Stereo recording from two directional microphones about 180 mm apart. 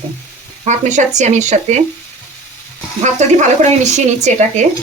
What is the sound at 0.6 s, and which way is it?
Speech, 40° right (ahead or behind).